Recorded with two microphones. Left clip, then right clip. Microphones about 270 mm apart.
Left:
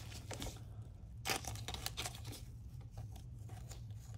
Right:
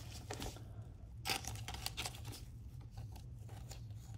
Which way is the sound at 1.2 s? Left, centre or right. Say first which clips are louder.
Left 1 dB; centre.